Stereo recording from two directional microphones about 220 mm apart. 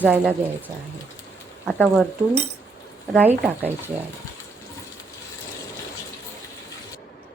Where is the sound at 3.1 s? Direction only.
5° right (ahead or behind).